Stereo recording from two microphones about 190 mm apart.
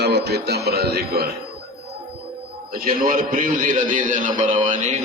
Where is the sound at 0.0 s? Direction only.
60° right (ahead or behind).